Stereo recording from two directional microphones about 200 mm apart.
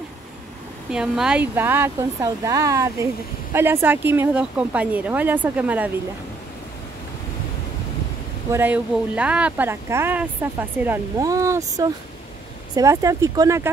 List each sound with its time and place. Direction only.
0.9 s speech: 5° right (ahead or behind)
8.5 s speech: 10° right (ahead or behind)